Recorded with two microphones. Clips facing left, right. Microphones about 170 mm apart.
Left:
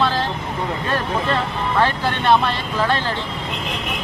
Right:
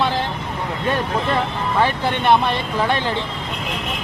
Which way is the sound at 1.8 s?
15° right (ahead or behind).